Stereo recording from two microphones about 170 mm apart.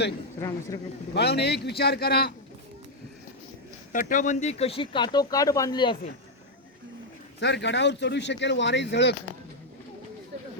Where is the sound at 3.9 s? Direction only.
50° left (ahead or behind); by 6.0 s 25° left (ahead or behind).